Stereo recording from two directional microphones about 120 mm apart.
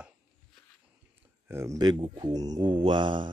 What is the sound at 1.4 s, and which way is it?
Speech, 20° right (ahead or behind).